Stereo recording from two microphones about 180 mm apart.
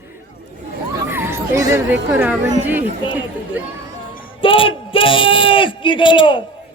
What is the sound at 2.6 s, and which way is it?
Speech, 10° right (ahead or behind).